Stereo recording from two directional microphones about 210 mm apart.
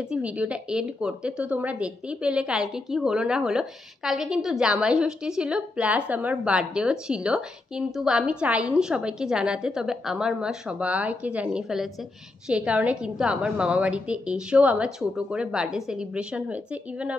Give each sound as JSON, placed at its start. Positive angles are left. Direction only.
{"t": 0.1, "sound": "a woman's voice", "side_deg": -5}